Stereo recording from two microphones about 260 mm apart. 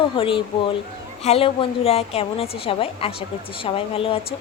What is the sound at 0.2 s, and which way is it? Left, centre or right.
Speech, centre.